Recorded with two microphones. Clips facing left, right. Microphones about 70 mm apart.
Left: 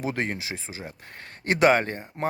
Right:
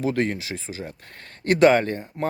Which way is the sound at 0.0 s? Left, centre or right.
Left.